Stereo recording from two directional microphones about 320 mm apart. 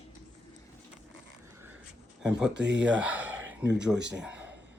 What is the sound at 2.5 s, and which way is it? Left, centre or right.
Speech, right.